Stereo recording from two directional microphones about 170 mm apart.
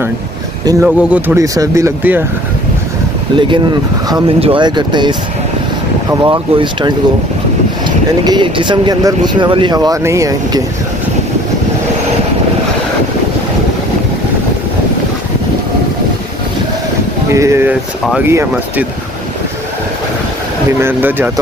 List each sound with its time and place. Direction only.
0.8 s speech: 10° right (ahead or behind)
3.3 s speech: 30° right (ahead or behind)
8.3 s speech: 30° right (ahead or behind)
17.3 s speech: 15° right (ahead or behind)
20.8 s speech: 15° right (ahead or behind)